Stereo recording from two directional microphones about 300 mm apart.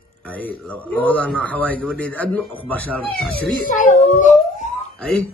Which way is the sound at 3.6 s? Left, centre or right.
Left.